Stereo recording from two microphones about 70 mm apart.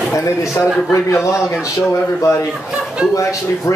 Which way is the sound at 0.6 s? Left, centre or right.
Left.